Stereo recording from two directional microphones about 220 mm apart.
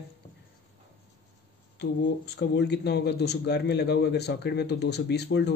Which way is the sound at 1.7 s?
50° left (ahead or behind).